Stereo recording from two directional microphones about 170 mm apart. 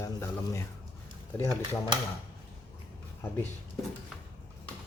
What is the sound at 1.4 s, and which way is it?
Speech, 20° left (ahead or behind).